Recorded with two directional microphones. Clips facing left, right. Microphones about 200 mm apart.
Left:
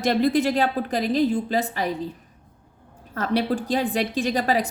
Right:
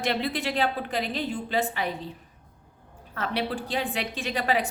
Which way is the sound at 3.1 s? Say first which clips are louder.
Left 6 dB; 40° left (ahead or behind).